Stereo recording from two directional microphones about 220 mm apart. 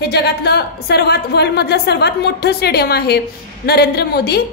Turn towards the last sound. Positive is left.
turn(degrees=45)  # may be behind; listen again after turning